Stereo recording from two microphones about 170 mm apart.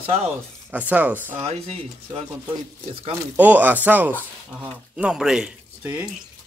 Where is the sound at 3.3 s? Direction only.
10° right (ahead or behind).